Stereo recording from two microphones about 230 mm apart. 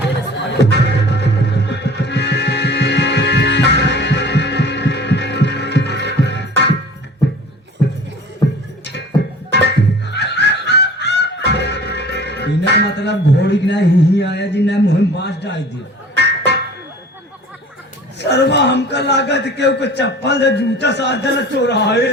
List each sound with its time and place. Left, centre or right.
0.6 s music: left
8.8 s music: left
9.5 s fowl: left
15.2 s a sound: left
16.1 s music: left
18.2 s a man's voice: left